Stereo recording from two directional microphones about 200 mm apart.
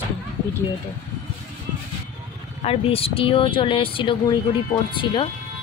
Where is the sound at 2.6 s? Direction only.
30° left (ahead or behind).